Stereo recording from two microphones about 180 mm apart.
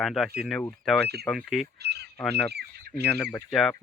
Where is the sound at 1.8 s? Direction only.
65° right (ahead or behind).